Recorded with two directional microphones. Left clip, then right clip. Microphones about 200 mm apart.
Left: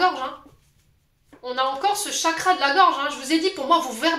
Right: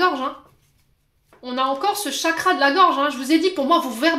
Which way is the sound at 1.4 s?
40° right (ahead or behind).